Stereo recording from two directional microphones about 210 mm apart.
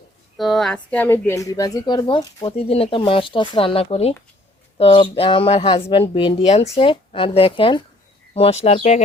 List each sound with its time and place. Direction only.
0.3 s a woman's voice: centre (ahead or behind); by 9.0 s 30° left (ahead or behind)